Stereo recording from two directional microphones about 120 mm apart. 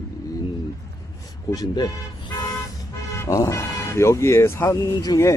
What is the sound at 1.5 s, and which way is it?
Speech, 35° left (ahead or behind).